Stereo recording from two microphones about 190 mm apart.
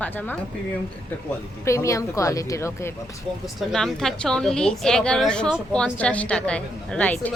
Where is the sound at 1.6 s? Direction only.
15° left (ahead or behind).